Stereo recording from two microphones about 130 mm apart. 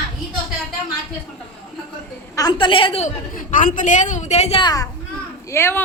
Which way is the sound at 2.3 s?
30° left (ahead or behind).